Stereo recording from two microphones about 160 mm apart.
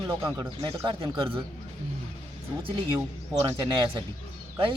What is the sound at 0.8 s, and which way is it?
Speech, 30° right (ahead or behind).